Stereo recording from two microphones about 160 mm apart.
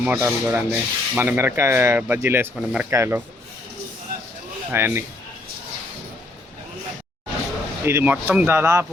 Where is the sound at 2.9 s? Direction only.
15° right (ahead or behind).